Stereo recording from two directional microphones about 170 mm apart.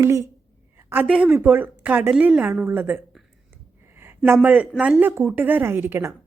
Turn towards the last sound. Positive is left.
turn(degrees=-15)  # may be behind; listen again after turning